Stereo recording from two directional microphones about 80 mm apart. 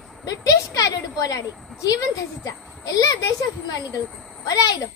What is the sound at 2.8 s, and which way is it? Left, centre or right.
Speech, left.